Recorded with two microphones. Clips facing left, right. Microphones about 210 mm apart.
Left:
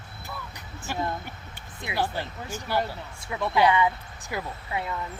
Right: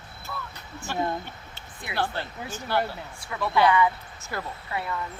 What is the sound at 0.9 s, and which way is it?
A woman's voice, 15° left (ahead or behind).